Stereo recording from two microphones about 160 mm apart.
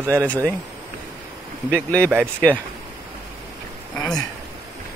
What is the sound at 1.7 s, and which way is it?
Speech, 10° left (ahead or behind).